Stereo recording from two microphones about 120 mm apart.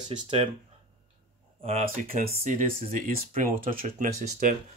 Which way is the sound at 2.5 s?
90° right.